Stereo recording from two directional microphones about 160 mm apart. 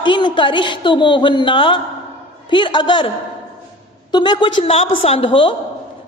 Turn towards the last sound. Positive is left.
turn(degrees=35)  # may be behind; listen again after turning